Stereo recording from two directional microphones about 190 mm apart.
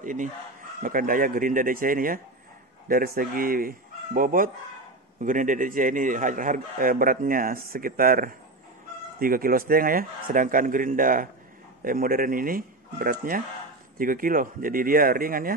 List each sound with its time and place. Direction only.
0.0 s a man's voice: 45° right (ahead or behind)